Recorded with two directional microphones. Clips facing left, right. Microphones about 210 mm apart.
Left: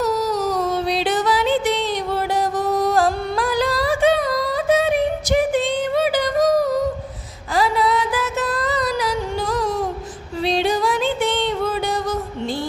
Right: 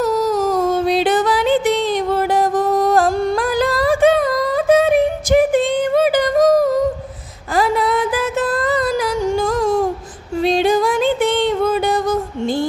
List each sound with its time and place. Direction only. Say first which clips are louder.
0.0 s music: right 4 dB; 50° right (ahead or behind)